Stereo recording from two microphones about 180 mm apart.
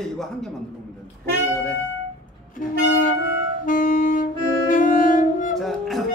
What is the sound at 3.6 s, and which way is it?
Saxophone, 50° left (ahead or behind).